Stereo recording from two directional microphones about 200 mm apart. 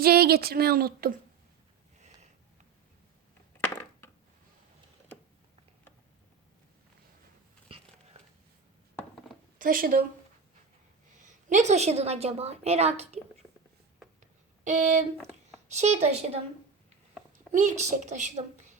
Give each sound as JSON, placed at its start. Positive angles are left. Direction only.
{"t": 0.0, "sound": "speech", "side_deg": -50}
{"t": 3.6, "sound": "crushing", "side_deg": 10}
{"t": 7.7, "sound": "a sound", "side_deg": -30}
{"t": 9.6, "sound": "speech", "side_deg": -45}
{"t": 11.2, "sound": "a woman's voice", "side_deg": -35}
{"t": 14.6, "sound": "a woman's voice", "side_deg": -35}
{"t": 17.3, "sound": "a sound", "side_deg": -35}
{"t": 17.9, "sound": "speech", "side_deg": -40}